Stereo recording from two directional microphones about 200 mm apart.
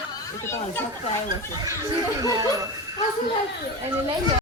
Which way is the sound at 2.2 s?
15° right (ahead or behind).